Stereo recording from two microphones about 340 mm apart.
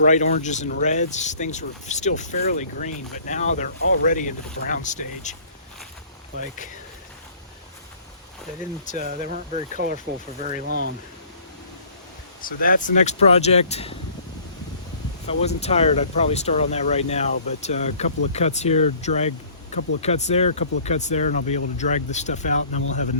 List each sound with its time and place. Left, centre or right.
0.0 s speech: left
9.0 s speech: centre
12.5 s speech: left
15.3 s speech: centre